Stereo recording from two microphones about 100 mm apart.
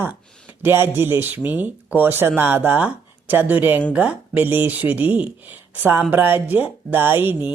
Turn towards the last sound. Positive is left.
turn(degrees=-20)  # may be behind; listen again after turning